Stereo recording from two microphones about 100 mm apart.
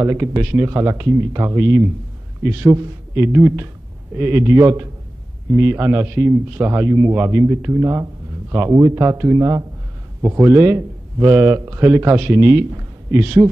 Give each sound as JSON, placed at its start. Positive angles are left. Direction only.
{"t": 0.0, "sound": "a man's voice", "side_deg": -30}